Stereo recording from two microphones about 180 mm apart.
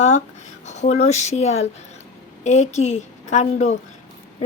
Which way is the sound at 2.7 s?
40° left (ahead or behind).